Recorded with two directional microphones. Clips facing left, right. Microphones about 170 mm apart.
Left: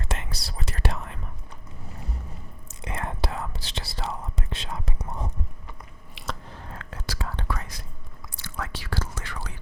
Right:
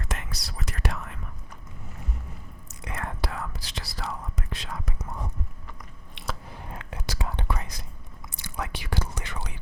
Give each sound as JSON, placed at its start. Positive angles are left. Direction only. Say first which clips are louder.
{"t": 0.0, "sound": "whispering", "louder": "left 2 dB", "side_deg": 25}
{"t": 2.6, "sound": "whispering", "louder": "left 2 dB", "side_deg": 25}
{"t": 6.2, "sound": "chewing", "louder": "even", "side_deg": 0}
{"t": 6.5, "sound": "whispering", "louder": "right 1 dB", "side_deg": -15}